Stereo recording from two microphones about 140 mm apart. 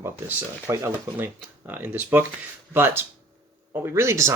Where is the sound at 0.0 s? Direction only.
15° right (ahead or behind).